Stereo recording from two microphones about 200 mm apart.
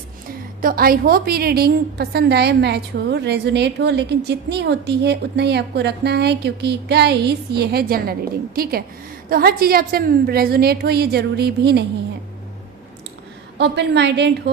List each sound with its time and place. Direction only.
0.6 s a woman's voice: 45° right (ahead or behind)
13.6 s a woman's voice: 60° right (ahead or behind)